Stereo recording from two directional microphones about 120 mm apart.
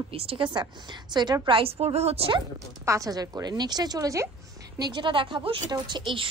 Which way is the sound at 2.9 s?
30° right (ahead or behind).